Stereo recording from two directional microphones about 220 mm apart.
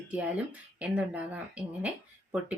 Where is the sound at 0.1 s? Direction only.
5° right (ahead or behind).